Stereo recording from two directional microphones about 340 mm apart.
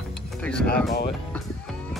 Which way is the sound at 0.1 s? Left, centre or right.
Centre.